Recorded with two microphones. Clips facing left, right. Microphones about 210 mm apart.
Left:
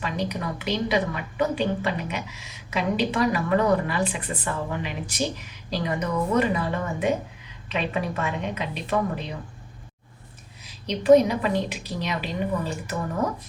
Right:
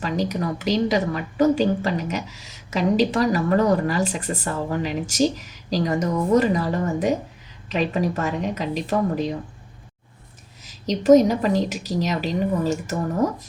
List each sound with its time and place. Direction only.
0.0 s a woman's voice: 40° right (ahead or behind)
10.6 s a woman's voice: 45° right (ahead or behind)